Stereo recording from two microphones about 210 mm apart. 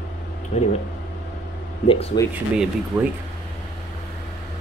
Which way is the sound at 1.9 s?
30° left (ahead or behind).